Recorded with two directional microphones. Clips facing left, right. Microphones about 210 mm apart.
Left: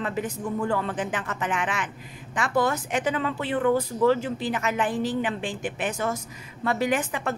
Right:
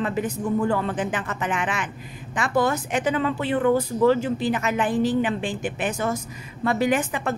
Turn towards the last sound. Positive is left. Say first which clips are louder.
# right 3 dB
turn(degrees=-15)  # may be behind; listen again after turning